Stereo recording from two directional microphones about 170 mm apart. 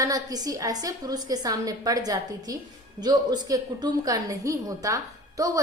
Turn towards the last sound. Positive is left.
turn(degrees=-20)  # may be behind; listen again after turning